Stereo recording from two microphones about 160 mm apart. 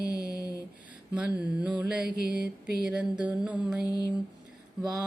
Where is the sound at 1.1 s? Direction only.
10° right (ahead or behind).